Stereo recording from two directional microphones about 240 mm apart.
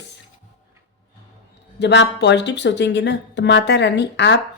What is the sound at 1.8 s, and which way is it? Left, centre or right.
Speech, left.